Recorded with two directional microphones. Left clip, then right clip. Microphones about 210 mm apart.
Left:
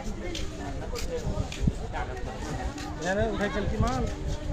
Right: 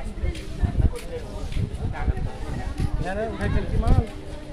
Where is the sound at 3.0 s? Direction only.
30° left (ahead or behind).